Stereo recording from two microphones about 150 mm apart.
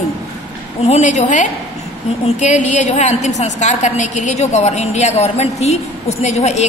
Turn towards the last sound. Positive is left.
turn(degrees=50)  # may be behind; listen again after turning